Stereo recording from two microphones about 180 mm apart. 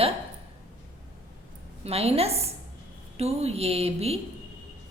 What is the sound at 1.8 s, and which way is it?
A woman's voice, 35° right (ahead or behind).